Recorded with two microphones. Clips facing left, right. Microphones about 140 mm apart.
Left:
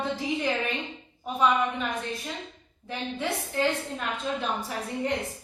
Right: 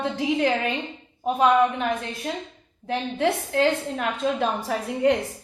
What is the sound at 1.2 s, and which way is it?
A woman's voice, 70° right (ahead or behind).